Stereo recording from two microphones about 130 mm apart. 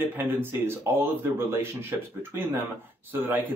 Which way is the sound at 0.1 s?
15° right (ahead or behind).